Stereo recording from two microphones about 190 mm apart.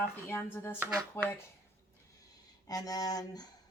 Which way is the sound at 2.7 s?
20° left (ahead or behind).